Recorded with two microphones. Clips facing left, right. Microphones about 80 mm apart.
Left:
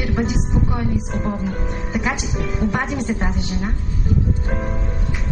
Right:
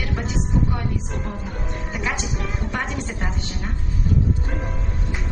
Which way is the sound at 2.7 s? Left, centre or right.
Centre.